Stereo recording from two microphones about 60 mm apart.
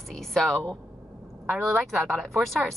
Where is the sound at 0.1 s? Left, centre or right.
Centre.